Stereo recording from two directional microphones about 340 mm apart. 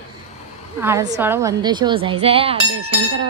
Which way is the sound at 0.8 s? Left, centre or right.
Centre.